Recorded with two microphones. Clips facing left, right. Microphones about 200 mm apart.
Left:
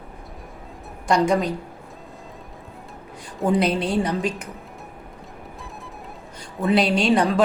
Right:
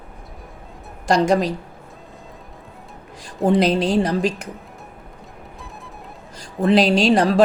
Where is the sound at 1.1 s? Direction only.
80° right.